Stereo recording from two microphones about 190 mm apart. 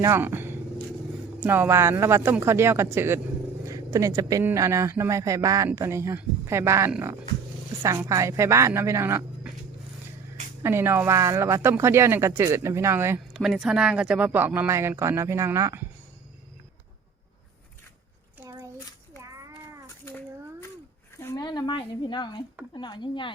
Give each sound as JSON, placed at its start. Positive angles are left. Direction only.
{"t": 0.0, "sound": "speech", "side_deg": -10}
{"t": 10.6, "sound": "speech", "side_deg": -15}
{"t": 13.3, "sound": "speech", "side_deg": 0}
{"t": 18.3, "sound": "a sound", "side_deg": -10}
{"t": 21.2, "sound": "speech", "side_deg": 15}